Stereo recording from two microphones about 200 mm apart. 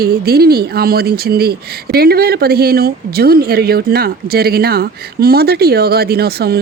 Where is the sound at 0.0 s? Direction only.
50° right (ahead or behind).